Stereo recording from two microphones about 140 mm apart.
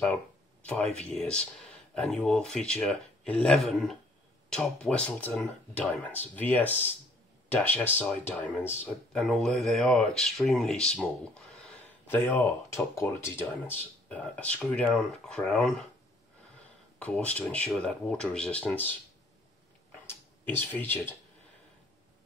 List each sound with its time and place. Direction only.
0.1 s speech: 10° left (ahead or behind)
8.4 s speech: centre (ahead or behind)
12.1 s speech: 15° left (ahead or behind)
17.0 s speech: 10° left (ahead or behind)
20.1 s speech: 15° left (ahead or behind)